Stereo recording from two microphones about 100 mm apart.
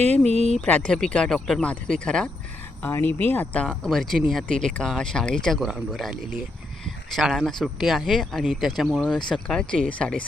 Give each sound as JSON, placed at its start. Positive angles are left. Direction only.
{"t": 0.6, "sound": "speech", "side_deg": 10}
{"t": 2.8, "sound": "speech", "side_deg": 20}